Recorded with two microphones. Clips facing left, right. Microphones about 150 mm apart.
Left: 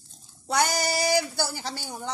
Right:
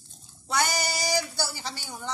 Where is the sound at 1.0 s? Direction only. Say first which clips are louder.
Left 6 dB; 55° left (ahead or behind).